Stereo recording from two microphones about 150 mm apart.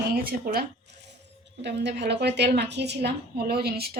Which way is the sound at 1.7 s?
90° right.